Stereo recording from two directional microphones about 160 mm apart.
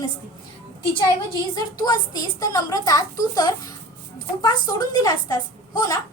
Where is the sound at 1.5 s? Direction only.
25° left (ahead or behind).